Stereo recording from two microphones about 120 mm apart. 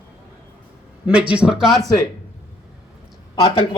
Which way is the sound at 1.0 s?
10° right (ahead or behind).